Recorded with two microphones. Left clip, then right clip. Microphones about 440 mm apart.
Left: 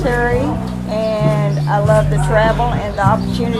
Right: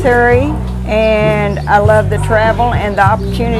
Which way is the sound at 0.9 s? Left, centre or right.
Right.